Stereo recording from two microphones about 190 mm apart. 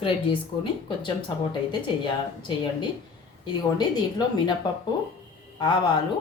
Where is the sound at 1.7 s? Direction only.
25° left (ahead or behind).